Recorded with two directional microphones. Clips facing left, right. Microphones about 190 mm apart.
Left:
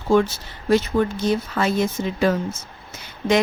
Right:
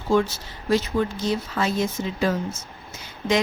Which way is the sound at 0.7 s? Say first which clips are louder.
Left 3 dB; 55° left (ahead or behind).